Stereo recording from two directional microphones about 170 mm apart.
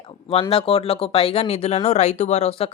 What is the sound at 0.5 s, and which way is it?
Speech, 35° left (ahead or behind).